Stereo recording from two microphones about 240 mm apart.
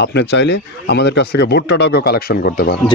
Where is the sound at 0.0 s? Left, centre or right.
Left.